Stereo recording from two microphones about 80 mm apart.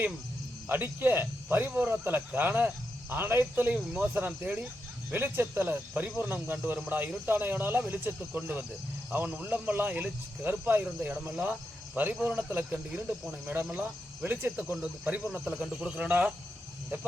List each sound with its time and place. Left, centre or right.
0.7 s speech: right
16.0 s speech: right